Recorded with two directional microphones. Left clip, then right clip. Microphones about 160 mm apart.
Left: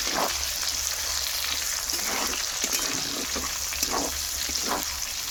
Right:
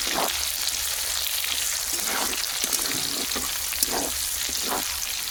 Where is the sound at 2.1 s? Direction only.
25° right (ahead or behind).